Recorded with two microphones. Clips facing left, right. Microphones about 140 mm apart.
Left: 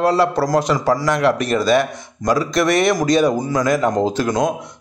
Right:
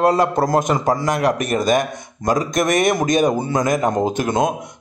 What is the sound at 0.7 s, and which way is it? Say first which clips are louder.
Speech: left 1 dB; 20° right (ahead or behind).